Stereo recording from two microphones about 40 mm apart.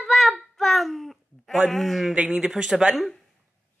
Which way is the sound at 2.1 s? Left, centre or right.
Right.